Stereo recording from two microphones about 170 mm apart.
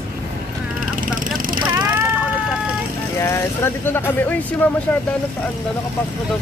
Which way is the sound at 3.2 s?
15° left (ahead or behind).